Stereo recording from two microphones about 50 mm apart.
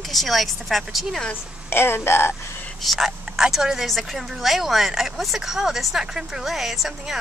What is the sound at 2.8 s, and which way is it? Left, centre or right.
Speech, centre.